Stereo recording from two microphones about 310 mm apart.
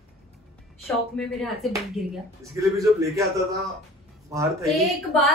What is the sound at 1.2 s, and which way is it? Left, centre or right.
Speech, centre.